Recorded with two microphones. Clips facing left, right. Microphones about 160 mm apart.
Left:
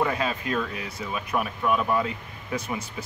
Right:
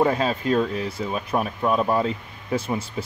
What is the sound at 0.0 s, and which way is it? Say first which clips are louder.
Speech: right 5 dB; 35° right (ahead or behind).